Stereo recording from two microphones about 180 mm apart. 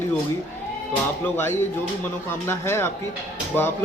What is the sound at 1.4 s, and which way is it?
Speech, 15° left (ahead or behind).